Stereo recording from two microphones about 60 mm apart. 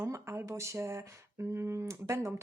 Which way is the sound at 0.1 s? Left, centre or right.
Right.